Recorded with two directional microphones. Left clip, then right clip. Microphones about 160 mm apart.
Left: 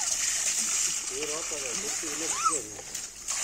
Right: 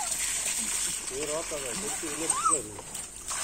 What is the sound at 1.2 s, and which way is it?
Gush, 20° right (ahead or behind).